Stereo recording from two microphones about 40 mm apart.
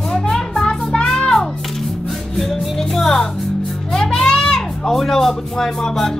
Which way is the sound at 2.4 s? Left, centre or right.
Centre.